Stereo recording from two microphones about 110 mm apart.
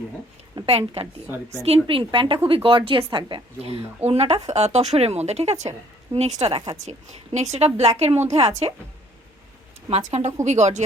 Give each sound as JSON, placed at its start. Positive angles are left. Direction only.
{"t": 0.6, "sound": "a woman's voice", "side_deg": -65}
{"t": 3.6, "sound": "a woman's voice", "side_deg": -65}
{"t": 9.9, "sound": "speech", "side_deg": -80}